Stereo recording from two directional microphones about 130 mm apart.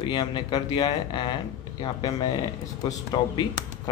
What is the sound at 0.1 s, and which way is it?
Speech, 35° left (ahead or behind).